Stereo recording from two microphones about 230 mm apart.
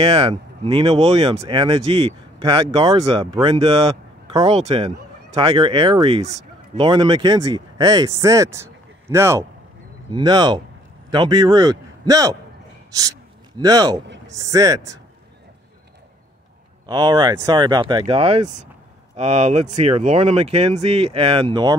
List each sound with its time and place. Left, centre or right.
0.0 s a man's voice: right
13.6 s speech: centre
16.8 s speech: centre